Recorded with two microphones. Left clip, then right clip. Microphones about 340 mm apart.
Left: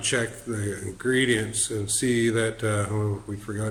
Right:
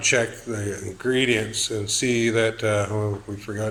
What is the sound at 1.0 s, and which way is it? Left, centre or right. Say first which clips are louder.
Speech: right 2 dB; right.